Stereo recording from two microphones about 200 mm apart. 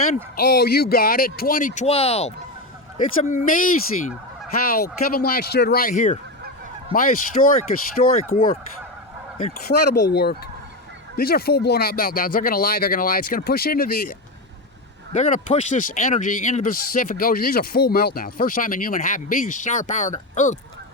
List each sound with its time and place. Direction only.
0.3 s speech: 50° left (ahead or behind)
4.7 s speech: 50° left (ahead or behind)
8.0 s speech: 35° left (ahead or behind)
8.3 s speech: 45° left (ahead or behind)
9.6 s speech: 55° left (ahead or behind); by 20.6 s 35° left (ahead or behind)